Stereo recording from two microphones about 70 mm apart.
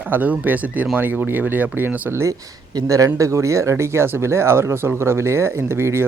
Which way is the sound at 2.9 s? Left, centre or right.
Right.